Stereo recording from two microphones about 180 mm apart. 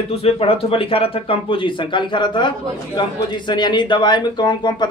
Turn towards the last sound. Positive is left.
turn(degrees=25)  # may be behind; listen again after turning